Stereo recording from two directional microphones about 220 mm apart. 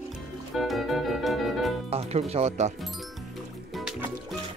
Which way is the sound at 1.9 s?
30° right (ahead or behind).